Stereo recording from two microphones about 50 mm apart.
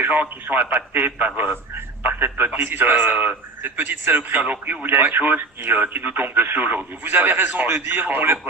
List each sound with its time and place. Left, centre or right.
0.0 s a man's voice: right